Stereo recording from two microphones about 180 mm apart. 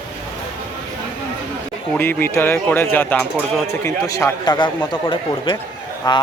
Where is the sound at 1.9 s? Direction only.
10° left (ahead or behind).